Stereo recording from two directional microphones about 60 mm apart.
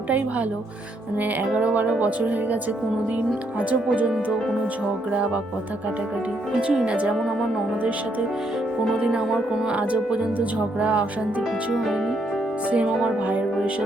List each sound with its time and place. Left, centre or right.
1.2 s speech: right
3.6 s speech: right
5.1 s speech: right
6.6 s speech: centre
7.2 s speech: centre
9.0 s speech: centre
12.7 s speech: centre